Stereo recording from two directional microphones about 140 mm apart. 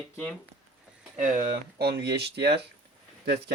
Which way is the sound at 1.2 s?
75° right (ahead or behind).